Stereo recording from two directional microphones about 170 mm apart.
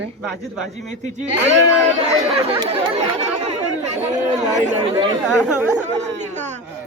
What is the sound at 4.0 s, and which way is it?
Speech, 15° right (ahead or behind).